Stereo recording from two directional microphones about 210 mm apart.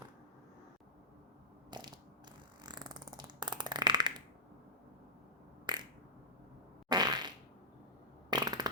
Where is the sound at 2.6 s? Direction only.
20° right (ahead or behind).